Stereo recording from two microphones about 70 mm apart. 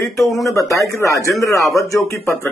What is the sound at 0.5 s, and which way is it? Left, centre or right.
Speech, left.